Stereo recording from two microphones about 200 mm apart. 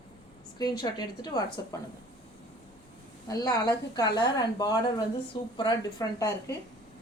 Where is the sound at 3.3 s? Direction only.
20° left (ahead or behind).